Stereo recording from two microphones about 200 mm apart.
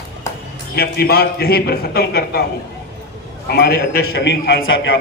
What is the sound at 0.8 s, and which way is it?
A man's voice, 50° left (ahead or behind).